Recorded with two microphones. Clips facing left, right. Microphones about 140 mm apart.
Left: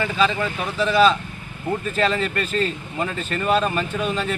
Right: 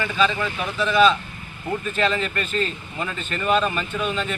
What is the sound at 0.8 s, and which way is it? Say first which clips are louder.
Speech: left 1 dB; 35° left (ahead or behind).